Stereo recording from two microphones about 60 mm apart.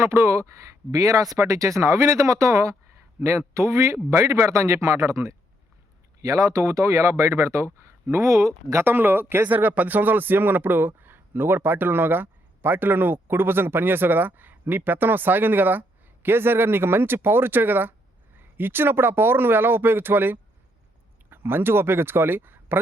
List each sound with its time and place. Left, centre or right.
0.0 s speech: right
6.2 s speech: right
8.8 s speech: right